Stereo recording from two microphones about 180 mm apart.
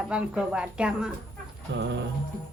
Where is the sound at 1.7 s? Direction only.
80° right.